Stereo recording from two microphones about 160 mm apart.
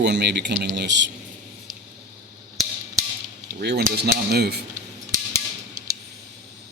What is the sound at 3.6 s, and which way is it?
A man's voice, 90° right.